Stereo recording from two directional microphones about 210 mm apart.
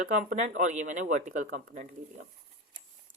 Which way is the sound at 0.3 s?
35° right (ahead or behind).